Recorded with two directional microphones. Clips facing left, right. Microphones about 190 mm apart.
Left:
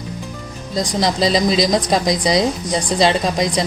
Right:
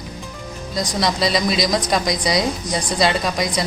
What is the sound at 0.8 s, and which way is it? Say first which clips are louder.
A woman's voice: left 3 dB; 25° left (ahead or behind).